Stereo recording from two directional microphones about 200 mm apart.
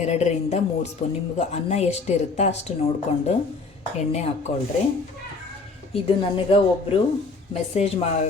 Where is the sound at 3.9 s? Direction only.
35° left (ahead or behind).